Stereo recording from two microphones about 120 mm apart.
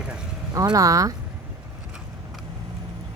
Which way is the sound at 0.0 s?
5° right (ahead or behind).